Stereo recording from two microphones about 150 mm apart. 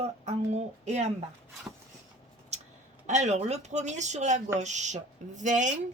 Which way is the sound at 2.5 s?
50° right (ahead or behind).